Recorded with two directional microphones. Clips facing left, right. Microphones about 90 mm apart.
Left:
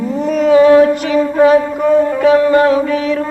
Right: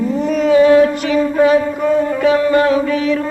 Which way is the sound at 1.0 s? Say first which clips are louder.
Left 2 dB; 40° left (ahead or behind).